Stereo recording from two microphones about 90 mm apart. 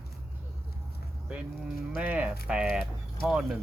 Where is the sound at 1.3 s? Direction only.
10° right (ahead or behind).